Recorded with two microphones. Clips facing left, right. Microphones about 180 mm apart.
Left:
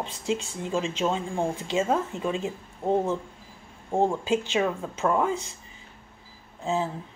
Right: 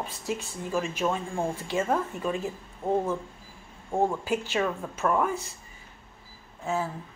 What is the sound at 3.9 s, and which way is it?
Speech, 20° left (ahead or behind).